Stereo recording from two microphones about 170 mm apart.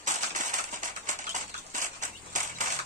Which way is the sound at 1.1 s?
50° right (ahead or behind).